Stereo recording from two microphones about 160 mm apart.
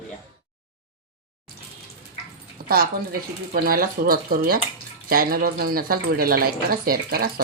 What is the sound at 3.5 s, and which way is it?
Speech, 65° right (ahead or behind).